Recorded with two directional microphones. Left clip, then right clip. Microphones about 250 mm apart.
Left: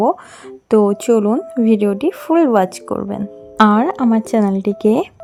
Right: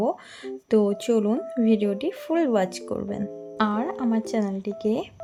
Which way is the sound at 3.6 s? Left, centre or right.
Left.